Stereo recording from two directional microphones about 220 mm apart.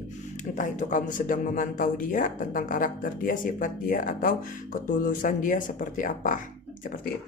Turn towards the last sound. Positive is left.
turn(degrees=35)  # may be behind; listen again after turning